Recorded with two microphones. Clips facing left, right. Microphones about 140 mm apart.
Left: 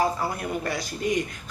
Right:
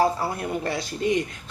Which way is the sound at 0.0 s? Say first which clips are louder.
Right 2 dB; 30° right (ahead or behind).